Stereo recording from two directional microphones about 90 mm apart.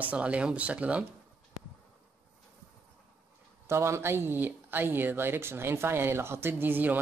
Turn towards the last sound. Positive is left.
turn(degrees=-20)  # may be behind; listen again after turning